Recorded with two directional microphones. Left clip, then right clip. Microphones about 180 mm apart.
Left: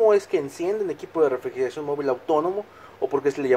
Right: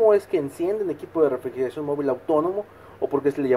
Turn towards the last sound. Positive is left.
turn(degrees=5)  # may be behind; listen again after turning